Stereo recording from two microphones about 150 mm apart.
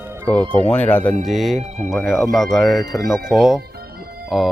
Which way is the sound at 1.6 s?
50° right (ahead or behind).